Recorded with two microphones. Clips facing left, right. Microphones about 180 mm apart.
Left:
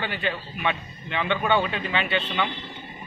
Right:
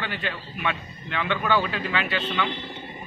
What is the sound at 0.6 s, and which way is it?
A man's voice, 25° left (ahead or behind).